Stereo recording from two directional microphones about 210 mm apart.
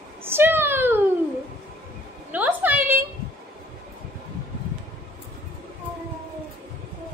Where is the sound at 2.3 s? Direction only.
10° right (ahead or behind).